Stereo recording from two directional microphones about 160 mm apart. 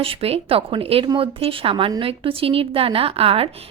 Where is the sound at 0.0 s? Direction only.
35° right (ahead or behind).